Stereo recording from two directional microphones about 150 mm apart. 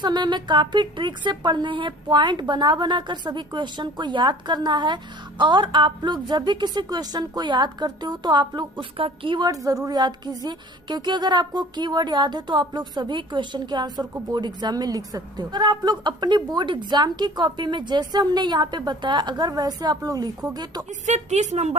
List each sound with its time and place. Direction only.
0.0 s a woman's voice: 30° right (ahead or behind)
21.1 s a woman's voice: 50° right (ahead or behind)